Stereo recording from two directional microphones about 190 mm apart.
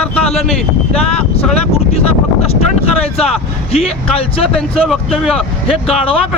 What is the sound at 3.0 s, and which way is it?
Speech, 30° left (ahead or behind).